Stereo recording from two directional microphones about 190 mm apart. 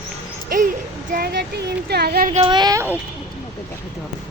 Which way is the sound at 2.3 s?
30° right (ahead or behind).